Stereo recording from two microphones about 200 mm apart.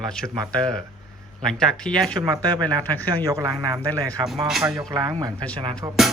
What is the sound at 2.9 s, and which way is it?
Speech, 10° left (ahead or behind).